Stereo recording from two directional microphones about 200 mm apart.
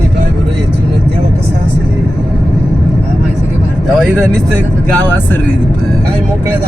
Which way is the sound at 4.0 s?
5° left (ahead or behind).